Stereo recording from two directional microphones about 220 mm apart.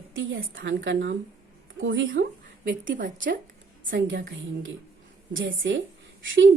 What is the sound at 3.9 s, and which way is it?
Speech, 55° right (ahead or behind).